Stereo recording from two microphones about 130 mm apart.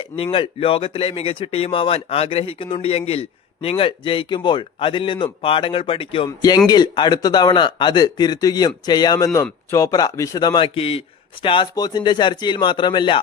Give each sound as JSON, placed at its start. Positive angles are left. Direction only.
{"t": 0.2, "sound": "speech", "side_deg": 45}
{"t": 6.2, "sound": "speech", "side_deg": 30}
{"t": 10.8, "sound": "speech", "side_deg": 45}